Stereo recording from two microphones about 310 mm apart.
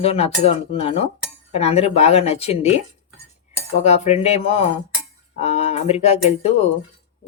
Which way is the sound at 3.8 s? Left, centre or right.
Left.